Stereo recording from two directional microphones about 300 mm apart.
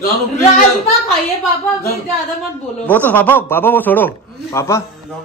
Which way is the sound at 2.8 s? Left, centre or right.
Centre.